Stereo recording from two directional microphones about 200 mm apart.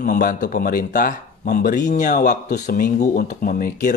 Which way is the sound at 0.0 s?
45° left (ahead or behind).